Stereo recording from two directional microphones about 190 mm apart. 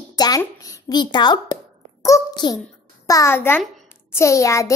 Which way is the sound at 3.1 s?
15° left (ahead or behind).